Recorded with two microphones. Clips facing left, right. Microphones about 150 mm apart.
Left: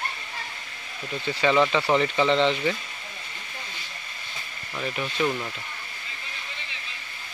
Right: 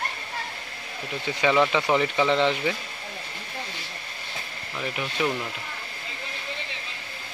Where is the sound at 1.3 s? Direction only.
10° right (ahead or behind).